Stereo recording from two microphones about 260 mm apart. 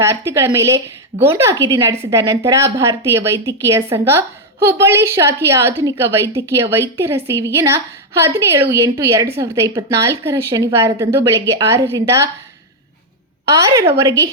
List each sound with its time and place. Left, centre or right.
0.0 s a woman's voice: centre
13.6 s a woman's voice: centre